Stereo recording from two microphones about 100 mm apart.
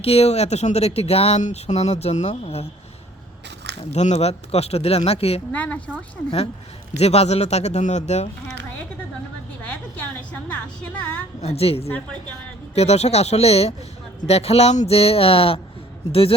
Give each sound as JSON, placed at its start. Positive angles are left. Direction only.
{"t": 0.0, "sound": "speech", "side_deg": 90}
{"t": 3.8, "sound": "speech", "side_deg": 90}
{"t": 5.5, "sound": "speech", "side_deg": 15}
{"t": 7.0, "sound": "speech", "side_deg": 90}
{"t": 10.3, "sound": "music", "side_deg": 15}
{"t": 11.3, "sound": "speech", "side_deg": 90}